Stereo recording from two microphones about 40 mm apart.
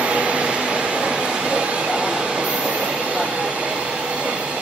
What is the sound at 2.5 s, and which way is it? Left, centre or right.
Train, right.